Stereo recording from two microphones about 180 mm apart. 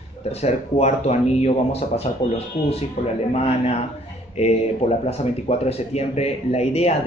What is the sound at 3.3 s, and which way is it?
Speech, 35° left (ahead or behind).